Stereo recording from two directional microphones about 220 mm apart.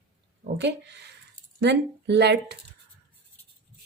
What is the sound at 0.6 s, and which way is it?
Speech, 50° right (ahead or behind).